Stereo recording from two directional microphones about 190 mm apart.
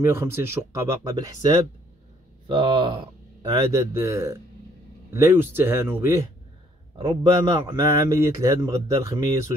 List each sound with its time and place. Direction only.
0.0 s speech: 10° right (ahead or behind)
7.0 s a man's voice: 30° right (ahead or behind)
7.4 s speech: 15° right (ahead or behind)